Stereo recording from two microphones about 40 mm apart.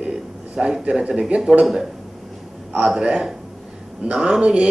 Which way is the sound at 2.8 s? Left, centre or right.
Centre.